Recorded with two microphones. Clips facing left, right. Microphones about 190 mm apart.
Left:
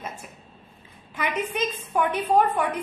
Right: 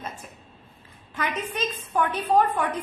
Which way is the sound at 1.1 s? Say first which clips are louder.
Left 2 dB; 10° left (ahead or behind).